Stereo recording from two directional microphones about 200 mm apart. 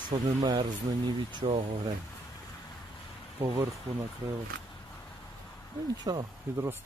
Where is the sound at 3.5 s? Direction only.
15° right (ahead or behind).